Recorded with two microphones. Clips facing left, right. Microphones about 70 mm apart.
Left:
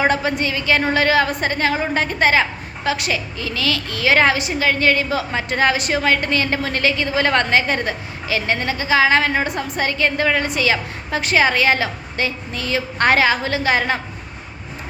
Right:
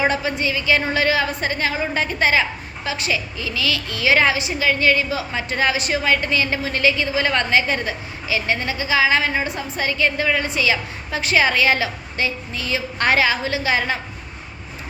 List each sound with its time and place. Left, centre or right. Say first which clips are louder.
0.0 s a woman's voice: left 2 dB; left
2.9 s a woman's voice: even; left